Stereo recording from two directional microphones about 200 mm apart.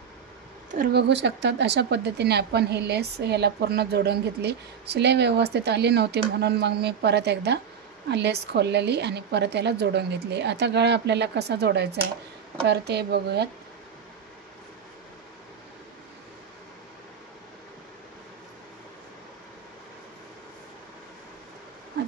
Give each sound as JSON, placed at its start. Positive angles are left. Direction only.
{"t": 0.9, "sound": "speech", "side_deg": -60}